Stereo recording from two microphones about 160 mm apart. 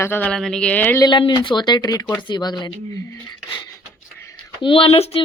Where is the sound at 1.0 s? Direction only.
30° left (ahead or behind).